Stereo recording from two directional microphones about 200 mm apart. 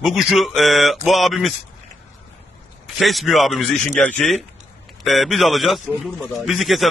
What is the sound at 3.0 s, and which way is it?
A man's voice, centre (ahead or behind).